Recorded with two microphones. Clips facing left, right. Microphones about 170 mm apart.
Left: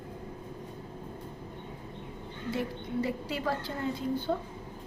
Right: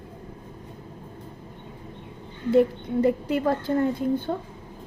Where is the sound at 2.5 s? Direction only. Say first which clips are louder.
Right 14 dB; 55° right (ahead or behind).